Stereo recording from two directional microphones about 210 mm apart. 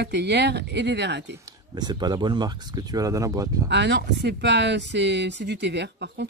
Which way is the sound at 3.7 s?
55° right (ahead or behind).